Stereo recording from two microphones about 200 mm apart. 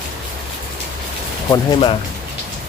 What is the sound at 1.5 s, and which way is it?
Speech, 25° left (ahead or behind).